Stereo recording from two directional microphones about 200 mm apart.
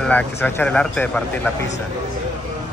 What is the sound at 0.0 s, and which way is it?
Speech, 10° left (ahead or behind).